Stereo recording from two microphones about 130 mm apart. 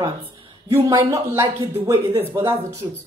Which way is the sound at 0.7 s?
20° right (ahead or behind).